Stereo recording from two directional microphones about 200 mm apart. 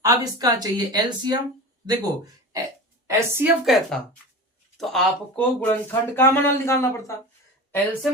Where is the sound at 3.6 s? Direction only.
Centre (ahead or behind).